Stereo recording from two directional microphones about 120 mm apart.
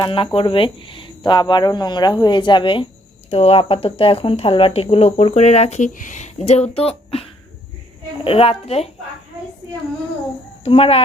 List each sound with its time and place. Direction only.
0.0 s speech: 40° left (ahead or behind)
3.2 s a woman's voice: 55° left (ahead or behind)
10.6 s a woman's voice: 50° left (ahead or behind)